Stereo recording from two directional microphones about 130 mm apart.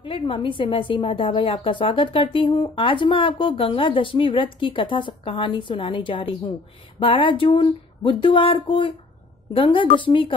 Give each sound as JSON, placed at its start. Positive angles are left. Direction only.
{"t": 0.0, "sound": "a woman's voice", "side_deg": 40}